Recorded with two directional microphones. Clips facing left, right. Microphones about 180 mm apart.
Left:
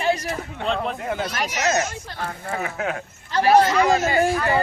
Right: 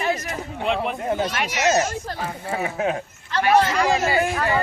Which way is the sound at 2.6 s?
25° right (ahead or behind).